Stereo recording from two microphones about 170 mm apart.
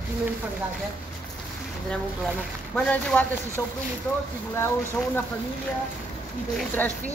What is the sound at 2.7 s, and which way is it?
Speech, 5° left (ahead or behind).